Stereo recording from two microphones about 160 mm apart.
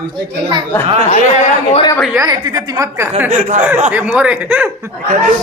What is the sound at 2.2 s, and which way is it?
A woman's voice, 25° right (ahead or behind).